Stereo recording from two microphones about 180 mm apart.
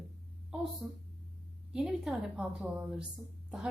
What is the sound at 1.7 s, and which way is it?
A woman's voice, 5° right (ahead or behind).